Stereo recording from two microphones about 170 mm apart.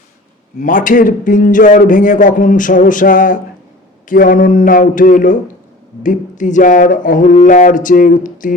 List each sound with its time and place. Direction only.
0.6 s speech: 50° left (ahead or behind)